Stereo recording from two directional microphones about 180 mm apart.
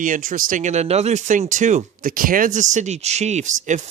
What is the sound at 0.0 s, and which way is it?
Speech, 45° right (ahead or behind).